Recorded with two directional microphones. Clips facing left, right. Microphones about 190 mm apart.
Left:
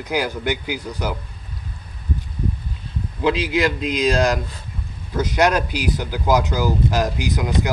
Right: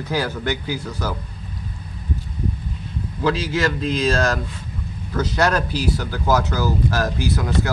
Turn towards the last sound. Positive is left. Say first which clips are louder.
# even
turn(degrees=15)  # may be behind; listen again after turning